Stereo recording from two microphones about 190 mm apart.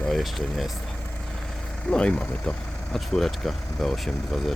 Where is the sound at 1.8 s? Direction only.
5° left (ahead or behind).